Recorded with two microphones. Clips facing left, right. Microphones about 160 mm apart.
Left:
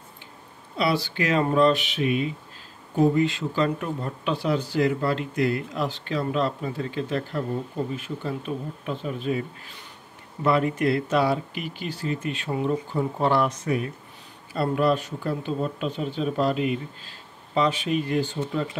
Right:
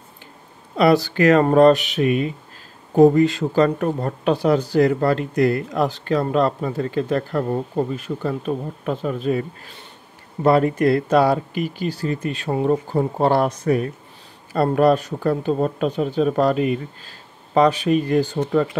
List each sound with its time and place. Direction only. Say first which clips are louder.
0.7 s speech: right 9 dB; 45° right (ahead or behind)
10.4 s speech: right 6 dB; 40° right (ahead or behind)
14.5 s speech: right 6 dB; 45° right (ahead or behind)
18.4 s speech: right 8 dB; 55° right (ahead or behind)